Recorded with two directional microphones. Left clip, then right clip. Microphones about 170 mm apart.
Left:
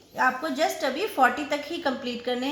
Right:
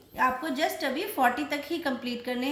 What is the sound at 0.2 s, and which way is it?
A woman's voice, 45° left (ahead or behind).